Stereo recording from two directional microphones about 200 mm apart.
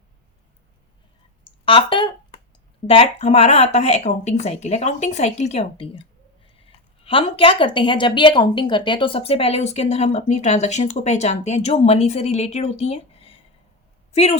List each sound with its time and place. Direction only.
1.6 s a woman's voice: 25° left (ahead or behind)